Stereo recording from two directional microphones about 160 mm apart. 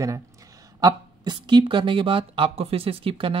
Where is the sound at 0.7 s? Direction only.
25° right (ahead or behind).